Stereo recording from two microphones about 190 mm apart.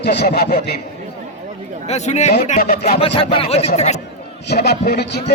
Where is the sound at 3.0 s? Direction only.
30° left (ahead or behind).